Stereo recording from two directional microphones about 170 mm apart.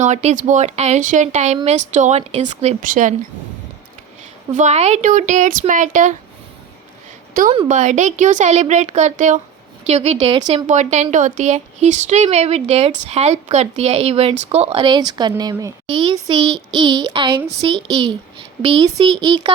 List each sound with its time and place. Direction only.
0.0 s a woman's voice: 40° right (ahead or behind)
4.5 s a woman's voice: 40° right (ahead or behind)
7.3 s a woman's voice: 55° right (ahead or behind); by 19.5 s 30° right (ahead or behind)